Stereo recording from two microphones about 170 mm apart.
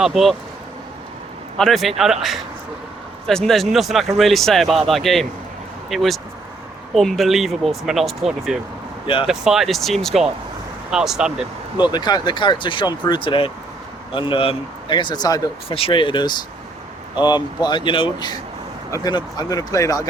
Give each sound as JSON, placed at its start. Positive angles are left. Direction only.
{"t": 0.0, "sound": "speech", "side_deg": 0}
{"t": 1.5, "sound": "speech", "side_deg": 0}
{"t": 11.8, "sound": "speech", "side_deg": 25}